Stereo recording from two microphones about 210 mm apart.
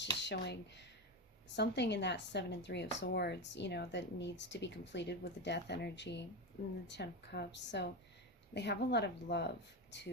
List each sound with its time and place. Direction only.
0.2 s a woman's voice: 55° left (ahead or behind)